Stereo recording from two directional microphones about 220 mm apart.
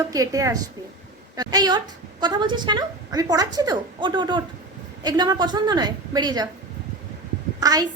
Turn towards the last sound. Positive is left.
turn(degrees=-15)  # may be behind; listen again after turning